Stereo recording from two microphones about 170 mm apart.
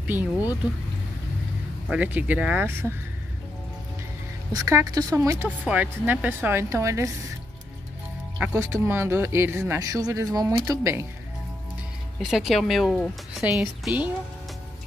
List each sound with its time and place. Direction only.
0.0 s speech: 10° right (ahead or behind)
1.9 s speech: 10° right (ahead or behind)
4.5 s a woman's voice: 20° right (ahead or behind)
8.4 s speech: 15° right (ahead or behind)
12.2 s speech: centre (ahead or behind)
13.6 s speech: 10° right (ahead or behind)